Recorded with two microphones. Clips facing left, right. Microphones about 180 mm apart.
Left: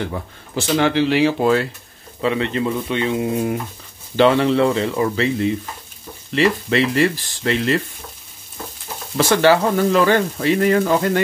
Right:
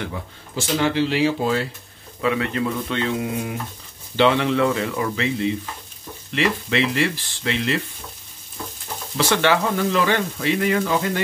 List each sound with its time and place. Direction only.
0.6 s speech: 65° left (ahead or behind)
2.2 s speech: 25° left (ahead or behind)
4.2 s speech: 40° left (ahead or behind)
9.1 s speech: 45° left (ahead or behind)